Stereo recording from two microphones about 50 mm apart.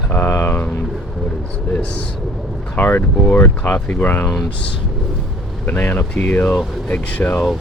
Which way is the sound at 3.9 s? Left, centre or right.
Left.